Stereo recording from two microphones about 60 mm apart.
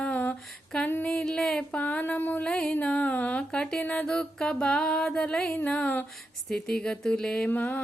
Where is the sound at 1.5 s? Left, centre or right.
Left.